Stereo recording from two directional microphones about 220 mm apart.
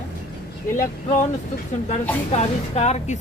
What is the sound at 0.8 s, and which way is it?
Speech, 35° left (ahead or behind).